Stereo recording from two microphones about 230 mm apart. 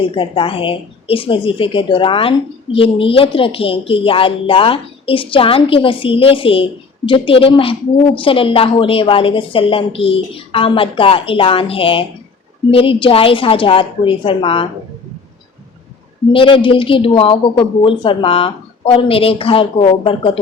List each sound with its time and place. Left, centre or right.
0.0 s a woman's voice: left
16.3 s a woman's voice: left